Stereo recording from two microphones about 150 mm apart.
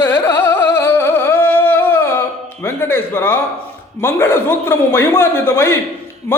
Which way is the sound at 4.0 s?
15° left (ahead or behind).